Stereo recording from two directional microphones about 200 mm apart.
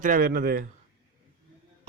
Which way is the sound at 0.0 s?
45° right (ahead or behind).